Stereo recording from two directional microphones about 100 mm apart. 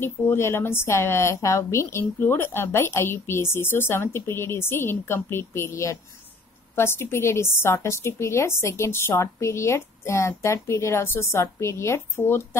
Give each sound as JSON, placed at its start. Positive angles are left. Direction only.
{"t": 0.0, "sound": "a woman's voice", "side_deg": 25}